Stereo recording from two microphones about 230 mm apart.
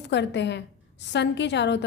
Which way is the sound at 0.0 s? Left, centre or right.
Left.